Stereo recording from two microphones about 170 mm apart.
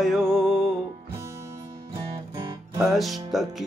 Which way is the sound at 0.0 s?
Centre (ahead or behind).